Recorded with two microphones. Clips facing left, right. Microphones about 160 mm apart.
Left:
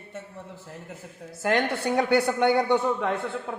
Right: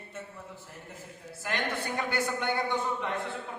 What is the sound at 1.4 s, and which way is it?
A woman's voice, 75° left (ahead or behind).